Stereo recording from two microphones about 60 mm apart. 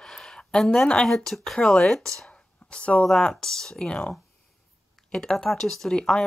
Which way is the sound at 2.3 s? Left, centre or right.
Centre.